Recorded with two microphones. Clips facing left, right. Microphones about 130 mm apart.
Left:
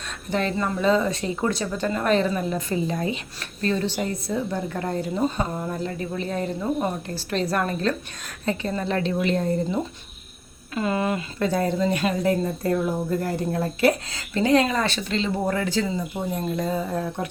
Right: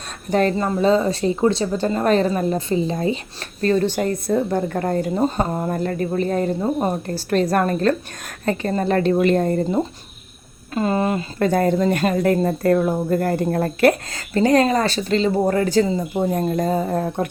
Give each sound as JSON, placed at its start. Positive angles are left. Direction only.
{"t": 0.3, "sound": "speech", "side_deg": -45}
{"t": 0.5, "sound": "speech", "side_deg": -35}
{"t": 2.6, "sound": "a woman's voice", "side_deg": -25}
{"t": 3.6, "sound": "speech", "side_deg": -45}
{"t": 10.8, "sound": "speech", "side_deg": -35}
{"t": 11.3, "sound": "speech", "side_deg": -50}